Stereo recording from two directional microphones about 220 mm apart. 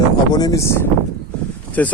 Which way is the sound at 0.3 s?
15° left (ahead or behind).